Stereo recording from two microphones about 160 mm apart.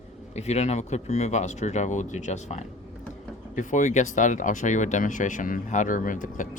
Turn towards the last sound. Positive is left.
turn(degrees=55)  # may be behind; listen again after turning